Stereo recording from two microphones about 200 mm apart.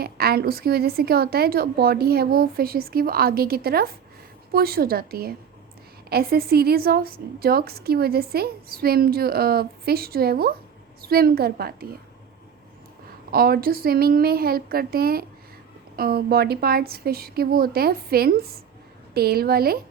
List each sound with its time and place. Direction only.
0.0 s a woman's voice: 50° right (ahead or behind)
13.3 s a woman's voice: 50° right (ahead or behind)